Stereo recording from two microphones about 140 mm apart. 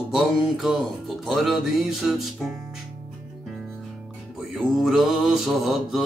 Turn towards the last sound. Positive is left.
turn(degrees=0)  # may be behind; listen again after turning